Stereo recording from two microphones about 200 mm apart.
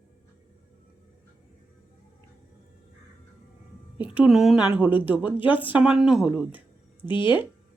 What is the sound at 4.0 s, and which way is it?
A woman's voice, 5° right (ahead or behind).